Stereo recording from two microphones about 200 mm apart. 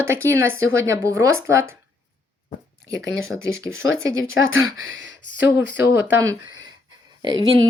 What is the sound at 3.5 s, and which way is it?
Speech, 85° right.